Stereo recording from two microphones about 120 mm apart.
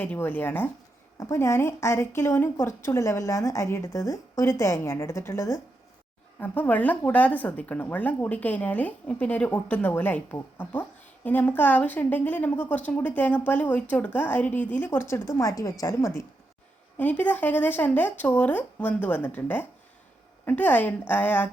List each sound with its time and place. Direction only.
0.0 s a woman's voice: 15° left (ahead or behind)
6.4 s a woman's voice: 15° left (ahead or behind)
17.0 s speech: 15° left (ahead or behind)